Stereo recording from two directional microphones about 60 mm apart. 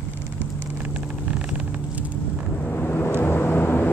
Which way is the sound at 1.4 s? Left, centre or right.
Right.